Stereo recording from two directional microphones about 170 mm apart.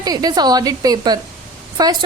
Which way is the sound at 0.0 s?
20° right (ahead or behind).